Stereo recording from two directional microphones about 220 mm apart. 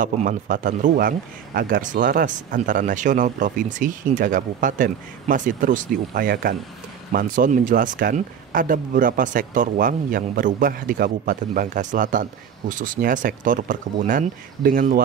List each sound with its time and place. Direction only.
0.0 s speech: 35° right (ahead or behind)